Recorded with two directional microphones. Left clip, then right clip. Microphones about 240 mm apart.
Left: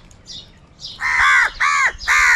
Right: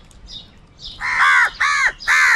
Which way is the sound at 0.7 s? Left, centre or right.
Left.